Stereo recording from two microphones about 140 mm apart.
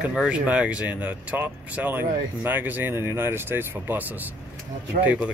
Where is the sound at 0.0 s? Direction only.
5° right (ahead or behind).